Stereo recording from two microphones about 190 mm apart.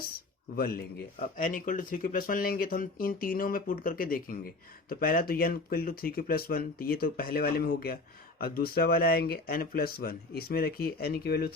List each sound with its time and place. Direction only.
0.0 s speech: 50° left (ahead or behind)